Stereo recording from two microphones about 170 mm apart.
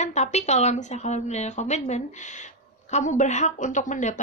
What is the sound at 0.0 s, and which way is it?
A woman's voice, 40° left (ahead or behind).